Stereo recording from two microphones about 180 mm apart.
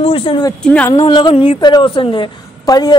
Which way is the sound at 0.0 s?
30° left (ahead or behind).